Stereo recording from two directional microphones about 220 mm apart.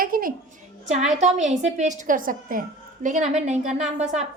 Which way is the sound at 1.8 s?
35° right (ahead or behind).